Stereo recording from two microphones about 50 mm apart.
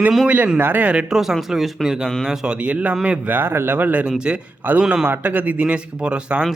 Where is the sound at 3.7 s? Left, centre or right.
Right.